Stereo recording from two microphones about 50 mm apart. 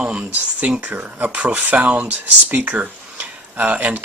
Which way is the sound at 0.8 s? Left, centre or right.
Right.